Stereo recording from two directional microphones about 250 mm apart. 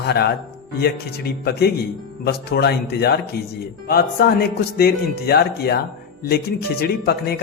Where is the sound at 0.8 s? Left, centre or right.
Left.